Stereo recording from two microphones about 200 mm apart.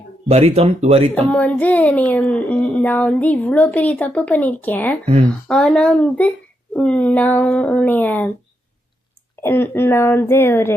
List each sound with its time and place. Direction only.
0.3 s speech: 30° right (ahead or behind)
1.1 s a child's voice: 5° left (ahead or behind)
9.4 s speech: 10° left (ahead or behind)